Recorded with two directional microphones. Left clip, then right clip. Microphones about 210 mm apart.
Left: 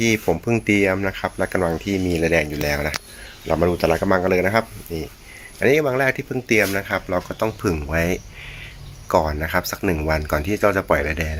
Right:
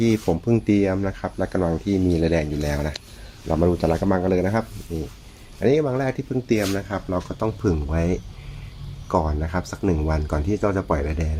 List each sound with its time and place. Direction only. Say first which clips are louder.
0.3 s speech: left 2 dB; centre (ahead or behind)